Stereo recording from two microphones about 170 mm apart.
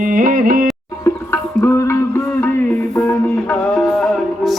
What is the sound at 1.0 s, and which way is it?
Music, 15° left (ahead or behind).